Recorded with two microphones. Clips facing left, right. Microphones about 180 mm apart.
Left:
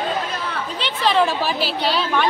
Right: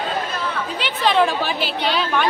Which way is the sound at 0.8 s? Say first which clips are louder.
Right 1 dB; centre (ahead or behind).